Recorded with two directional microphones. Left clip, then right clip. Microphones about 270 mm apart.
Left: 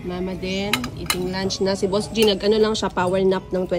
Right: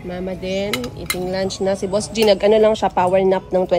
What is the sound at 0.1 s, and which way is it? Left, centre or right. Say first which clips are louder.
Speech: right 3 dB; centre.